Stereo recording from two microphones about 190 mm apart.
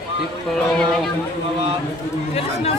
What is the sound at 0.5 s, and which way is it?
Speech, centre (ahead or behind).